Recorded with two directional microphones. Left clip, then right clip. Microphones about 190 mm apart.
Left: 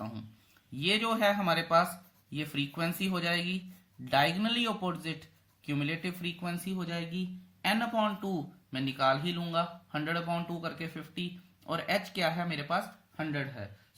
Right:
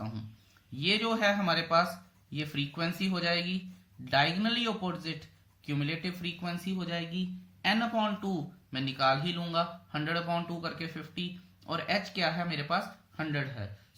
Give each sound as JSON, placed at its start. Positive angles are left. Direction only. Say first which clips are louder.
{"t": 0.8, "sound": "speech", "louder": "even", "side_deg": 30}